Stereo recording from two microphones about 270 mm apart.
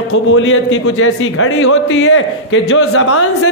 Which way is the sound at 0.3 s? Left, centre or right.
Left.